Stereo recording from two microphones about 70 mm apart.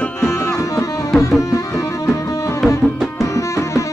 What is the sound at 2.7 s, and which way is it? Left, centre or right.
Music, left.